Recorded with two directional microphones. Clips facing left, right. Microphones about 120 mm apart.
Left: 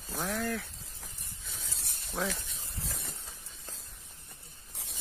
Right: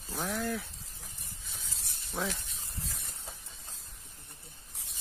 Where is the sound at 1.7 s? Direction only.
60° left (ahead or behind).